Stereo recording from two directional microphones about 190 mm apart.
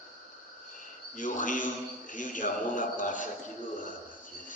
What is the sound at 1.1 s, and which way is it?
Speech, 45° left (ahead or behind).